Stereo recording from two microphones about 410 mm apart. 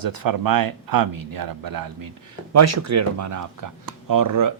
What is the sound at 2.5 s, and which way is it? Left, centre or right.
Speech, right.